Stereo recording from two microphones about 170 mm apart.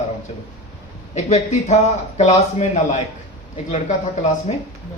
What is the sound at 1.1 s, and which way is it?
A man's voice, 40° left (ahead or behind).